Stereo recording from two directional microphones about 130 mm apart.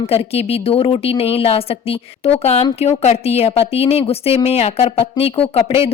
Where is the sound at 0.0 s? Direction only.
50° left (ahead or behind).